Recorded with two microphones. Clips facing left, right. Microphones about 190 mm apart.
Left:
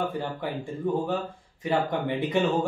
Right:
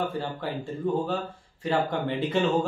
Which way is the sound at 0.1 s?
15° left (ahead or behind).